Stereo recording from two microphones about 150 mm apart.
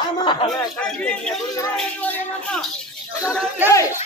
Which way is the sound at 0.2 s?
35° left (ahead or behind).